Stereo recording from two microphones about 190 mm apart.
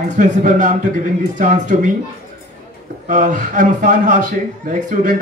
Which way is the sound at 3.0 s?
40° right (ahead or behind).